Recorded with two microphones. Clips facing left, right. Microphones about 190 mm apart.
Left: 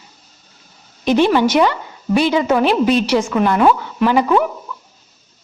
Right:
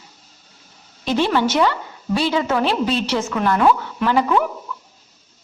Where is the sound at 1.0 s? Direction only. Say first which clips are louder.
Left 5 dB; 15° left (ahead or behind).